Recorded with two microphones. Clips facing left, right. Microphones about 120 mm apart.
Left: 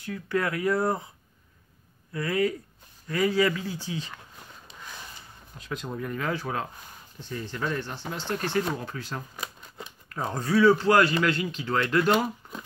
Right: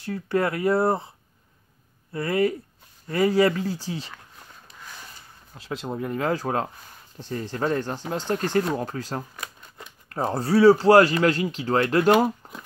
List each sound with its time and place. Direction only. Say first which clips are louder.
0.0 s speech: right 4 dB; 30° right (ahead or behind)
2.1 s speech: right 3 dB; 30° right (ahead or behind)
5.6 s speech: right 4 dB; 30° right (ahead or behind)
6.3 s speech: right 5 dB; 40° right (ahead or behind)